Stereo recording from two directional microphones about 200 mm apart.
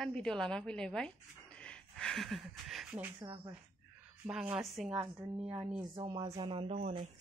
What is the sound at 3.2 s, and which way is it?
Speech, 25° right (ahead or behind).